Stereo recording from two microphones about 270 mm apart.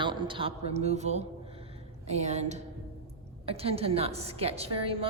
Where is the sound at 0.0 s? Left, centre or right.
Centre.